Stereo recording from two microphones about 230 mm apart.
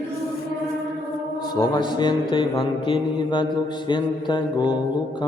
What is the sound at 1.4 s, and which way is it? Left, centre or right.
A man's voice, centre.